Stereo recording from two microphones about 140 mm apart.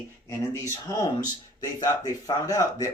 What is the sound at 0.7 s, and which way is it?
Speech, 25° left (ahead or behind).